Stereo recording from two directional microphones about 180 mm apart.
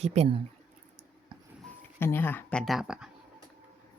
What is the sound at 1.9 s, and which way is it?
Speech, 10° left (ahead or behind).